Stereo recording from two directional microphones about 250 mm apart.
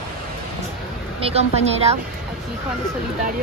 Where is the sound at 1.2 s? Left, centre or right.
Right.